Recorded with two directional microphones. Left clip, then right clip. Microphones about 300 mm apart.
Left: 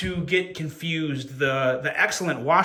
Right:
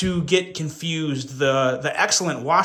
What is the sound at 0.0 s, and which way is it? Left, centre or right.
Speech, centre.